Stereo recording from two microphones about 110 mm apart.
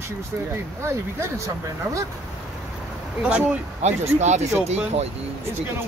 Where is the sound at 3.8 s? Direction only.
90° right.